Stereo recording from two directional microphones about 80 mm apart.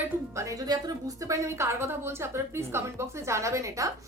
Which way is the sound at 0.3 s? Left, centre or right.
Right.